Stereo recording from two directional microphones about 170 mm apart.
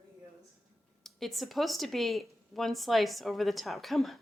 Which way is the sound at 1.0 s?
Centre (ahead or behind).